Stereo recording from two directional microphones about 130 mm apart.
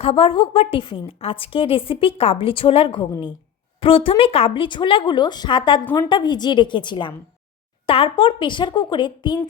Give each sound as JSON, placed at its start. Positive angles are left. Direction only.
{"t": 0.0, "sound": "a woman's voice", "side_deg": 50}